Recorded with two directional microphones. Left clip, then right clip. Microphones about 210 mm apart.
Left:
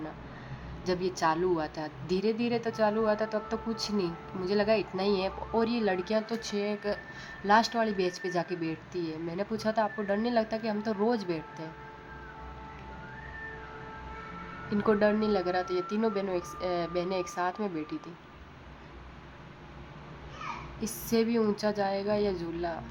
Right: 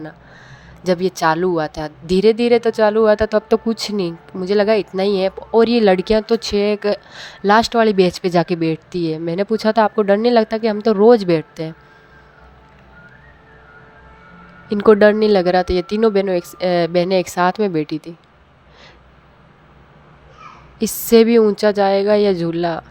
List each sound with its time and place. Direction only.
0.9 s a woman's voice: 40° right (ahead or behind)
14.7 s a woman's voice: 35° right (ahead or behind)
20.7 s a woman's voice: 40° right (ahead or behind)